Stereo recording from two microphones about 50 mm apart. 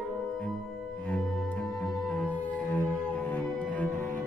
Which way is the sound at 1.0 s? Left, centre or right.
Left.